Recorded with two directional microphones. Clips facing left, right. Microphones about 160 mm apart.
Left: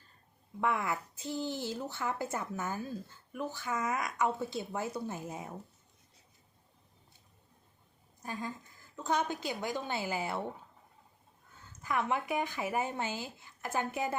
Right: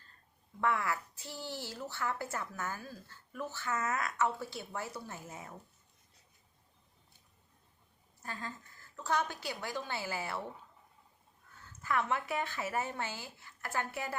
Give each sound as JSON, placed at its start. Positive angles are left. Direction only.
{"t": 0.6, "sound": "a woman's voice", "side_deg": 20}
{"t": 8.2, "sound": "a woman's voice", "side_deg": 15}
{"t": 11.7, "sound": "speech", "side_deg": 15}